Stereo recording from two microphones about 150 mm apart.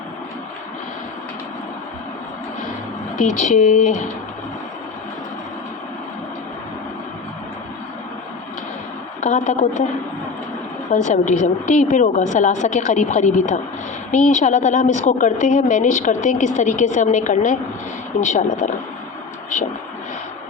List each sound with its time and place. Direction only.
3.2 s a woman's voice: 60° left (ahead or behind)
9.2 s a woman's voice: 55° left (ahead or behind)
10.9 s a woman's voice: 55° left (ahead or behind)